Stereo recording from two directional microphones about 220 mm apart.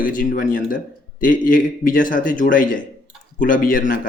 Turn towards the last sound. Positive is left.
turn(degrees=40)  # may be behind; listen again after turning